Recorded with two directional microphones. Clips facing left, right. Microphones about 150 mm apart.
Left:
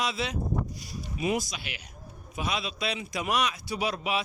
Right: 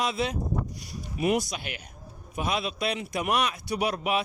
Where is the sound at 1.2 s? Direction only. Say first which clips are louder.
Right 4 dB; 65° right (ahead or behind).